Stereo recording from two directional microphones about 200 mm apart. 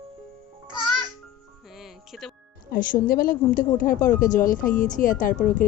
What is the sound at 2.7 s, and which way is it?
A woman's voice, 45° left (ahead or behind).